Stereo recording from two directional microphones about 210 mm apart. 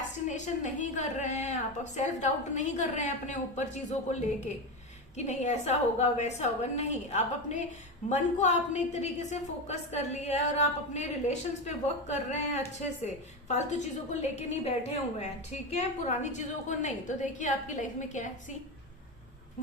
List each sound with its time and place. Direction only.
0.3 s a woman's voice: 35° left (ahead or behind)